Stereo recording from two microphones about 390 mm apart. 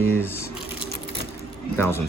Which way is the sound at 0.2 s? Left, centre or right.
Centre.